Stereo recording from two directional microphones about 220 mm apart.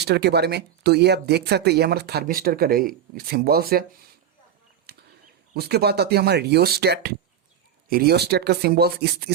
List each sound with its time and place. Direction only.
0.0 s speech: 50° right (ahead or behind)
4.9 s a sound: 45° right (ahead or behind)
5.5 s speech: 45° right (ahead or behind)